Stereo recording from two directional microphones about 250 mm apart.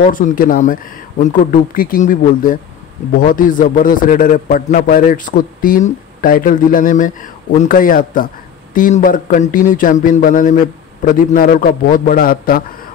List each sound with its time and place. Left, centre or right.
0.0 s speech: left